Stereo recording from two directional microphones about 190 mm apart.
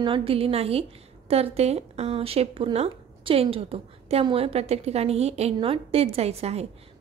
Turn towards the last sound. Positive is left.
turn(degrees=-35)  # may be behind; listen again after turning